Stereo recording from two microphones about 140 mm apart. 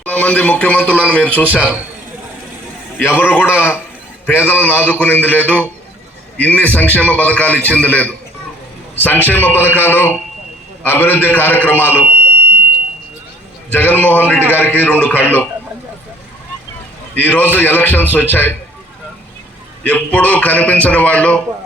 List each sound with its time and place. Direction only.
0.0 s a man's voice: 10° left (ahead or behind)
3.0 s a man's voice: 15° left (ahead or behind)
13.7 s a man's voice: 15° left (ahead or behind)
17.2 s a man's voice: 10° left (ahead or behind)
19.8 s a man's voice: 10° left (ahead or behind)